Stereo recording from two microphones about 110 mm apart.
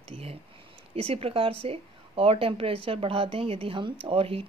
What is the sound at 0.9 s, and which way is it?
A woman's voice, 60° right (ahead or behind).